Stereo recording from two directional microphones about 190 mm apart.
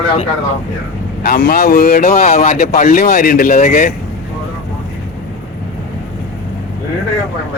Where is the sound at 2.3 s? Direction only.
35° left (ahead or behind).